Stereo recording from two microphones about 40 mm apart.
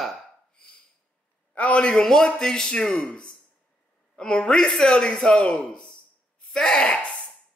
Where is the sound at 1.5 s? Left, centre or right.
Left.